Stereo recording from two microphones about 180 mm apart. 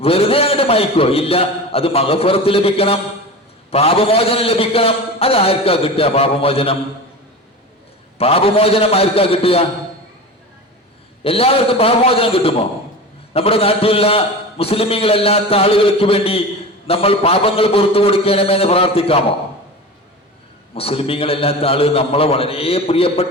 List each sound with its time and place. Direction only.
0.0 s a man's voice: 35° left (ahead or behind)
8.2 s a man's voice: 35° left (ahead or behind)
11.2 s a man's voice: 30° left (ahead or behind)
20.7 s a man's voice: 30° left (ahead or behind)